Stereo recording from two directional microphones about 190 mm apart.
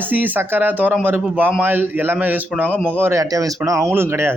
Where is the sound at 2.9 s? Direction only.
10° right (ahead or behind).